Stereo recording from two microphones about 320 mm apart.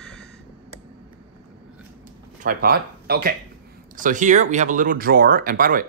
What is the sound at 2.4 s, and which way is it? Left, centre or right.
Speech, right.